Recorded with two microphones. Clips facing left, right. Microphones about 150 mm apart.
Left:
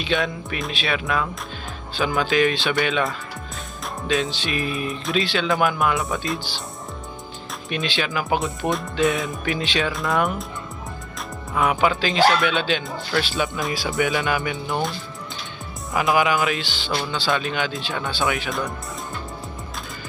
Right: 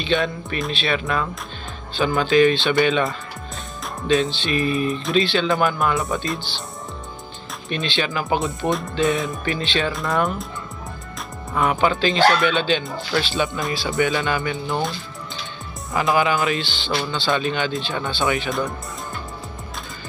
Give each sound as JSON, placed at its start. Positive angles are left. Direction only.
{"t": 0.0, "sound": "speech", "side_deg": 5}
{"t": 7.7, "sound": "speech", "side_deg": 5}
{"t": 11.5, "sound": "speech", "side_deg": 5}